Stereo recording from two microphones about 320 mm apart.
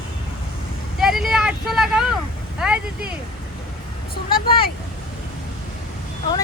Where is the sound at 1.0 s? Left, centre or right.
Centre.